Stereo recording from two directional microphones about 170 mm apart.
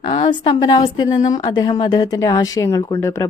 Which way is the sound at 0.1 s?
30° left (ahead or behind).